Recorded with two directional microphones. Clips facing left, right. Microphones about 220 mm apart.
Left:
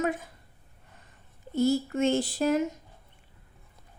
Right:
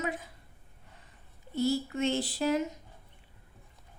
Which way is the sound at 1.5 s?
45° left (ahead or behind).